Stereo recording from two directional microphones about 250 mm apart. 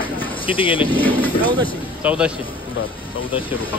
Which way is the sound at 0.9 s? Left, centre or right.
Centre.